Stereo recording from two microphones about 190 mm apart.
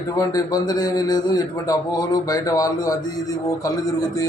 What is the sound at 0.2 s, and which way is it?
A man's voice, 20° left (ahead or behind).